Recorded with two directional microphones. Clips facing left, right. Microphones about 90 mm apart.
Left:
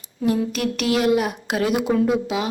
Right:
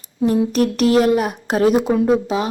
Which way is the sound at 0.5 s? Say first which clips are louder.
Right 7 dB; 40° right (ahead or behind).